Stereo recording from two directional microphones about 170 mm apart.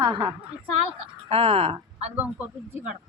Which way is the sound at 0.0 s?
25° right (ahead or behind).